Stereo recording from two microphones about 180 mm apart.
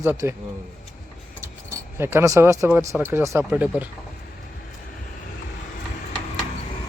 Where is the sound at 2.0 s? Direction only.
15° right (ahead or behind).